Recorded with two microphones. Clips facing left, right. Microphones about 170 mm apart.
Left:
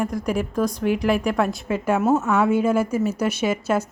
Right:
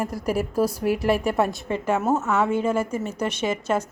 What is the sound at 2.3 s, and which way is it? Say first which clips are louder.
A woman's voice: left 3 dB; 10° left (ahead or behind).